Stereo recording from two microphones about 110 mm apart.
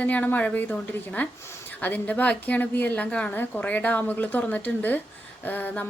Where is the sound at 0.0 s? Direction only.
15° left (ahead or behind).